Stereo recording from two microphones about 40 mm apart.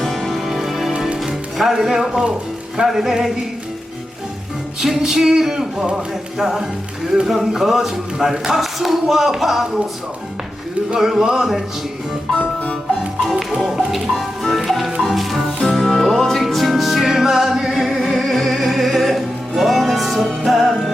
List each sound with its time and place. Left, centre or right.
0.0 s music: centre
1.2 s speech: centre
4.8 s speech: centre
5.7 s a sound: right
6.3 s speech: centre
10.9 s speech: centre
13.6 s speech: centre
15.0 s music: centre
17.7 s chant: centre
18.2 s music: centre